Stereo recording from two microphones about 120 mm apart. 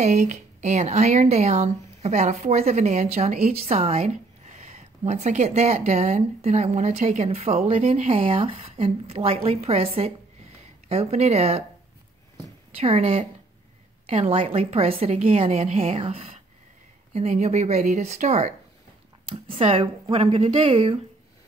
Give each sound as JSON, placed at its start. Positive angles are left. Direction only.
{"t": 0.0, "sound": "speech", "side_deg": -80}
{"t": 12.7, "sound": "speech", "side_deg": -55}
{"t": 19.5, "sound": "a woman's voice", "side_deg": -50}